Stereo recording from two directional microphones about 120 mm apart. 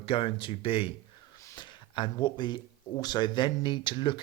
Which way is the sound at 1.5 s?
40° left (ahead or behind).